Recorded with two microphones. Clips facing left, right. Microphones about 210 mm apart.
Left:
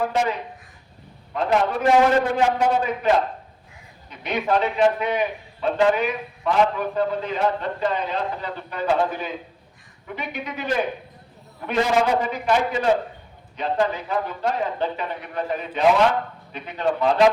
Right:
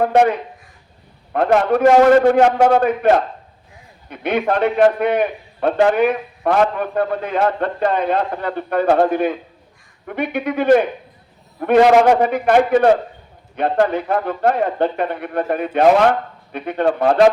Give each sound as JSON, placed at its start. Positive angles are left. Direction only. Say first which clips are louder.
{"t": 0.0, "sound": "a man's voice", "louder": "right 8 dB", "side_deg": -60}
{"t": 4.1, "sound": "a man's voice", "louder": "right 4 dB", "side_deg": -60}